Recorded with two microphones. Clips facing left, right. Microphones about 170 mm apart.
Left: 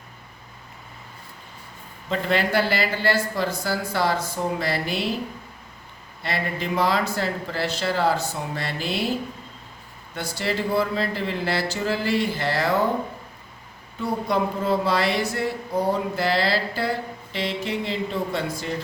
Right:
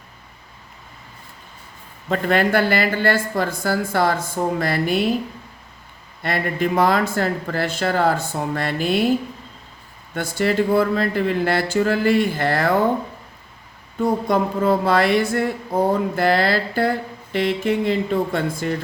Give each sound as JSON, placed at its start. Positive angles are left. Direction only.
{"t": 2.0, "sound": "speech", "side_deg": -50}
{"t": 6.2, "sound": "speech", "side_deg": -50}
{"t": 10.2, "sound": "speech", "side_deg": -50}
{"t": 14.0, "sound": "speech", "side_deg": -50}